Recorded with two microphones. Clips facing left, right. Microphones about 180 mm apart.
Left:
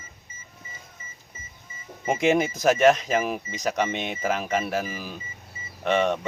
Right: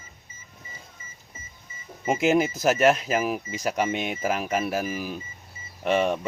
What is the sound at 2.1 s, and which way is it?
Speech, centre (ahead or behind).